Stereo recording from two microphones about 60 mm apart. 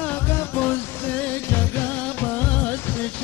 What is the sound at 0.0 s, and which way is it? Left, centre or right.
Music, left.